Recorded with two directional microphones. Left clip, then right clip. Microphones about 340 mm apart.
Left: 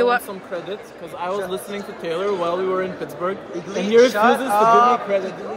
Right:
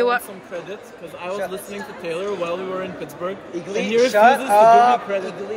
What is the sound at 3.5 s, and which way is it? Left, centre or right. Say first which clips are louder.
Speech: right 1 dB; right.